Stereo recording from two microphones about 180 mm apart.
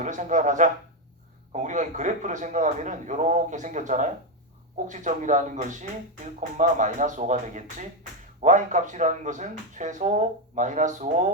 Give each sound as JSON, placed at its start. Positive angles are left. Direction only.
{"t": 0.0, "sound": "a man's voice", "side_deg": -45}